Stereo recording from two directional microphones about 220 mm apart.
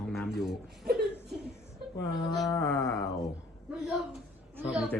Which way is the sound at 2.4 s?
15° left (ahead or behind).